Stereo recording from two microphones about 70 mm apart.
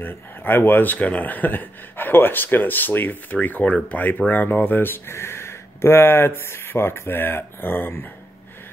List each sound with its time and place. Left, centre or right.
0.0 s speech: left